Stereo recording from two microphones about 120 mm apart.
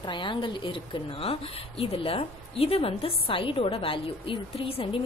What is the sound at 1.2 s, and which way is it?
A woman's voice, 55° left (ahead or behind).